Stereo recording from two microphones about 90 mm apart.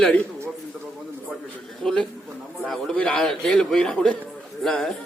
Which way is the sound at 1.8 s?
5° left (ahead or behind).